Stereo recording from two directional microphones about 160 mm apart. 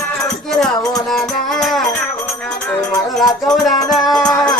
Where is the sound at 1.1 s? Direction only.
Centre (ahead or behind).